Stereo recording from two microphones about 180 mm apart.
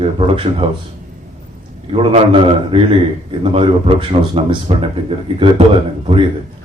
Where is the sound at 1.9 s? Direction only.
30° right (ahead or behind).